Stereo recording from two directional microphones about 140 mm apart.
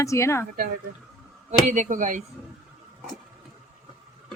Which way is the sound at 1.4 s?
60° right (ahead or behind).